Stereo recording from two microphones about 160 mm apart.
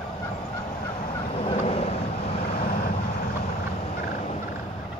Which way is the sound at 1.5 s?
40° left (ahead or behind).